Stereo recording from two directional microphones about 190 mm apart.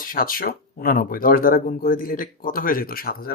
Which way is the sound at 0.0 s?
45° left (ahead or behind).